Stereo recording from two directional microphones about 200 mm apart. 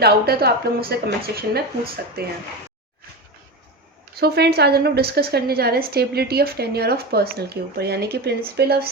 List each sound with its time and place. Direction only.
0.0 s a woman's voice: 50° right (ahead or behind)
4.1 s a woman's voice: 50° right (ahead or behind)